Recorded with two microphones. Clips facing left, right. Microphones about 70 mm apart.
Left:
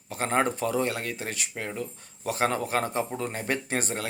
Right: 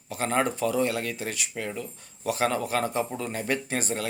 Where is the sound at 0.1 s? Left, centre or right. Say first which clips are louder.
Even; left.